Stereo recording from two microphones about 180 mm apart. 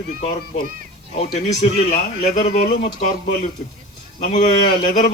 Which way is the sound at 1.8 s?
40° left (ahead or behind).